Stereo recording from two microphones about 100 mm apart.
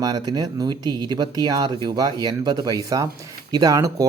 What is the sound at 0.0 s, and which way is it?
Speech, 40° right (ahead or behind).